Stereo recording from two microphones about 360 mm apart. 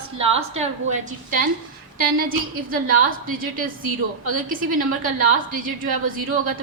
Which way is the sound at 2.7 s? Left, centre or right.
Right.